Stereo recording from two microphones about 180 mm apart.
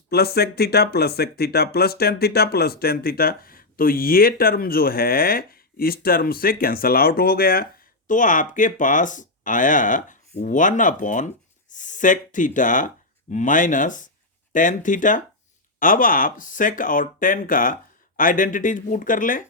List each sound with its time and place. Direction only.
0.1 s speech: 60° left (ahead or behind)